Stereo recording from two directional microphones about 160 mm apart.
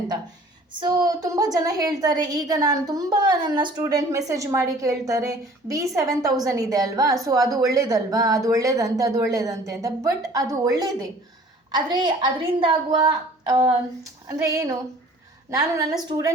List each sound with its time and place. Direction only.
0.8 s a woman's voice: 25° right (ahead or behind)